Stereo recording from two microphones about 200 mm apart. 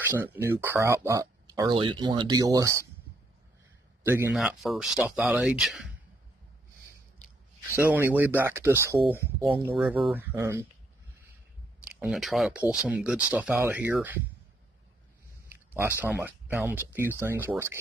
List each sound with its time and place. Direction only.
0.1 s speech: 10° right (ahead or behind)
4.0 s a man's voice: 10° right (ahead or behind)
7.7 s speech: 10° right (ahead or behind)
11.8 s speech: 5° right (ahead or behind)
15.4 s speech: 10° right (ahead or behind)